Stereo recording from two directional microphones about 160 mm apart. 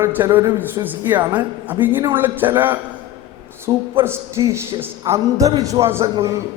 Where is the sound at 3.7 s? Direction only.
25° right (ahead or behind).